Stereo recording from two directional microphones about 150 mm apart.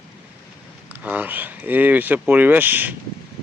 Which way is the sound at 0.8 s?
10° right (ahead or behind).